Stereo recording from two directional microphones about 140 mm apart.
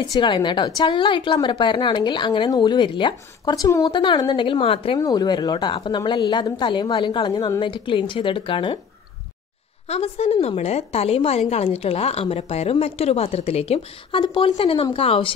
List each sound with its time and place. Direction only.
0.0 s a woman's voice: 30° left (ahead or behind)
3.9 s a woman's voice: 35° left (ahead or behind)
5.0 s a woman's voice: 30° left (ahead or behind)
9.8 s a woman's voice: 45° left (ahead or behind)